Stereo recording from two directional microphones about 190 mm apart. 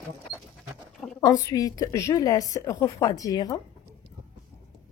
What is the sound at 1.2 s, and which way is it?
A woman's voice, 20° left (ahead or behind).